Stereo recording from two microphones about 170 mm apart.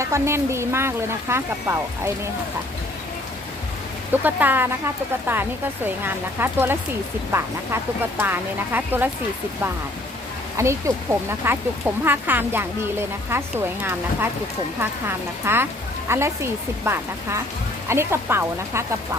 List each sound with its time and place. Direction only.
0.0 s speech: 15° right (ahead or behind)
4.1 s speech: 10° right (ahead or behind)
10.6 s speech: 15° right (ahead or behind)
14.8 s speech: 15° right (ahead or behind)